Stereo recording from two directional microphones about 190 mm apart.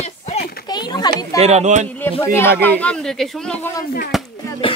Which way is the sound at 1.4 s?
35° right (ahead or behind).